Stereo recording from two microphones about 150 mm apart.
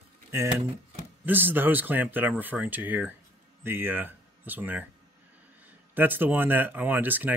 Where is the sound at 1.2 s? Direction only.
15° right (ahead or behind).